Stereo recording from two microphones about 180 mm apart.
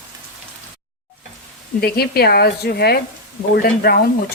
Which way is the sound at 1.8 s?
60° left (ahead or behind).